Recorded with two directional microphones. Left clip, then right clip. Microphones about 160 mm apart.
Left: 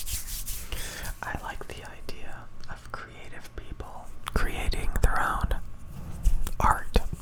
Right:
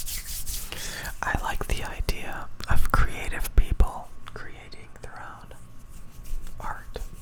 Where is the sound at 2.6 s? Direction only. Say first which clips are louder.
Right 14 dB; 60° right (ahead or behind); by 4.0 s 30° right (ahead or behind).